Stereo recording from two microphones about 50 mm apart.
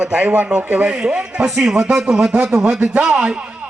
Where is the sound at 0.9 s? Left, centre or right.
Centre.